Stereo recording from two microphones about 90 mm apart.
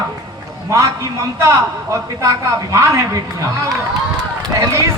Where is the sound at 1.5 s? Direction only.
35° right (ahead or behind).